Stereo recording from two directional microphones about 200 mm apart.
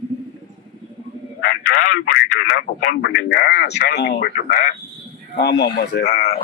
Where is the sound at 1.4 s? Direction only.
45° left (ahead or behind).